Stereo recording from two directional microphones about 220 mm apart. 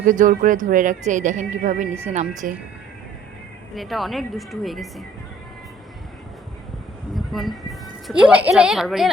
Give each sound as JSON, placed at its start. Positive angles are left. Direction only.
{"t": 0.0, "sound": "speech", "side_deg": -35}
{"t": 3.8, "sound": "speech", "side_deg": 0}
{"t": 7.1, "sound": "a woman's voice", "side_deg": 0}